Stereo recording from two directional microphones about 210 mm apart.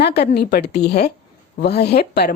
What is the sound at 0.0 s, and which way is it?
A woman's voice, 50° left (ahead or behind).